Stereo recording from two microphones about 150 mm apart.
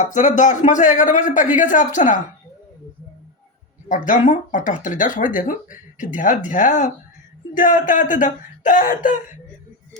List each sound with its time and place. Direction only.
0.1 s speech: 55° left (ahead or behind)
3.8 s speech: 60° left (ahead or behind)